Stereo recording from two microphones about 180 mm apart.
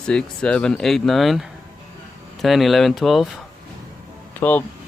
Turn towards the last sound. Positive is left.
turn(degrees=10)  # may be behind; listen again after turning